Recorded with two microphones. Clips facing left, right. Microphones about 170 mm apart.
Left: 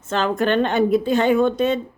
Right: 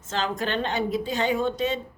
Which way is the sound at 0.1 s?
60° left (ahead or behind).